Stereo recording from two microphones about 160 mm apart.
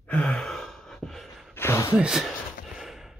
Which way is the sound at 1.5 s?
15° left (ahead or behind).